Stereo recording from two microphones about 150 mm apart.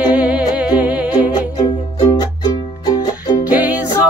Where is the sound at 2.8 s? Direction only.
25° left (ahead or behind).